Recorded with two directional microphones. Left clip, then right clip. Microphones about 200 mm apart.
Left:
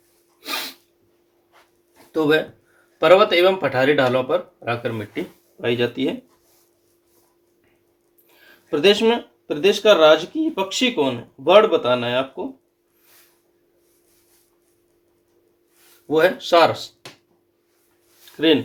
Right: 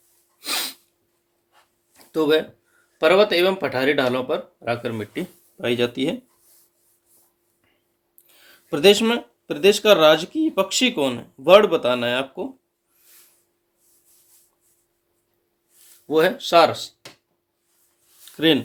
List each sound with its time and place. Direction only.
0.3 s sneeze: 55° right (ahead or behind)
2.1 s speech: 50° right (ahead or behind)
8.4 s speech: 55° right (ahead or behind)
16.0 s speech: 50° right (ahead or behind)
18.3 s speech: 55° right (ahead or behind)